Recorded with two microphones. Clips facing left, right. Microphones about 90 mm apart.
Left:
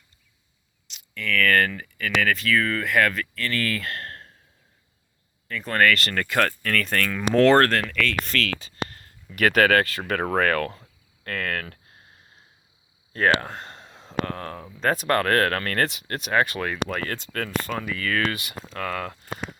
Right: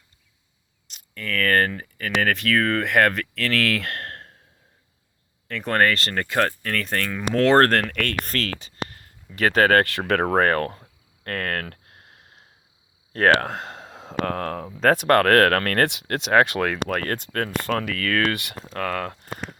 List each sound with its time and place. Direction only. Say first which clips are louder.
0.9 s speech: left 2 dB; 45° right (ahead or behind)
3.3 s speech: right 4 dB; 90° right; by 4.4 s 55° right (ahead or behind)
5.5 s speech: right 3 dB; 60° right (ahead or behind)
5.8 s speech: left 2 dB; 30° right (ahead or behind)
7.7 s speech: right 2 dB; 50° right (ahead or behind)
8.5 s a sound: left 1 dB; 20° right (ahead or behind)
9.3 s speech: even; 30° right (ahead or behind)
9.7 s speech: right 3 dB; 60° right (ahead or behind)
10.2 s cricket: even; 45° right (ahead or behind); by 12.5 s 70° right (ahead or behind)
13.1 s speech: right 3 dB; 65° right (ahead or behind); by 14.7 s 90° right
14.8 s speech: right 5 dB; 80° right
16.9 s speech: right 4 dB; 55° right (ahead or behind)
18.7 s speech: right 3 dB; 50° right (ahead or behind)